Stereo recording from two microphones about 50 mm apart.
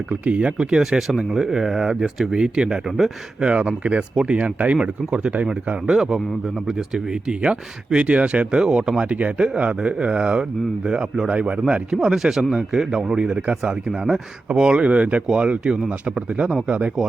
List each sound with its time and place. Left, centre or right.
0.1 s speech: right
4.8 s speech: centre
5.9 s a man's voice: centre
9.0 s speech: right
11.9 s speech: centre; by 15.2 s right
15.3 s speech: centre